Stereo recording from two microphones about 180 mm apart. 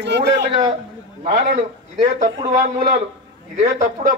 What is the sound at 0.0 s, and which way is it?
Speech, 70° right (ahead or behind).